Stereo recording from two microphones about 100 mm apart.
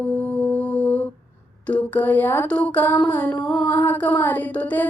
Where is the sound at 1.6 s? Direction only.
15° left (ahead or behind).